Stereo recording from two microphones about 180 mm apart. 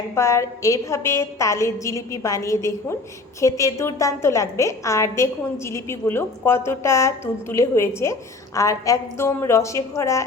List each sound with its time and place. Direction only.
0.1 s a woman's voice: 15° left (ahead or behind)